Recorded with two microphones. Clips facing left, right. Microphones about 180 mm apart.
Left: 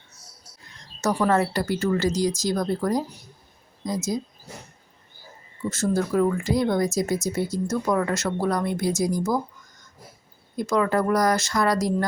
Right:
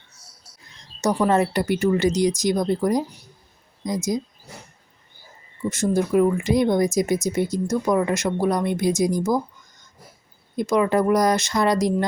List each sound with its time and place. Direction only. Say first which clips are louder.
1.3 s speech: right 2 dB; 20° right (ahead or behind)
5.6 s speech: right 2 dB; 15° right (ahead or behind)
10.6 s speech: right 3 dB; 20° right (ahead or behind)